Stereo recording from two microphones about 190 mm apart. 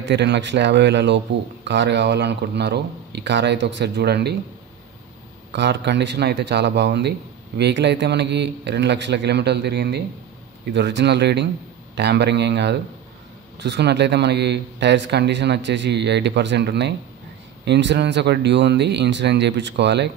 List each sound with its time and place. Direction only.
0.0 s a man's voice: 65° right (ahead or behind)
5.5 s a man's voice: 65° right (ahead or behind)